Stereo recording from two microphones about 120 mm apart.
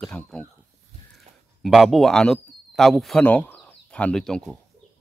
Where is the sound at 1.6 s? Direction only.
Centre (ahead or behind).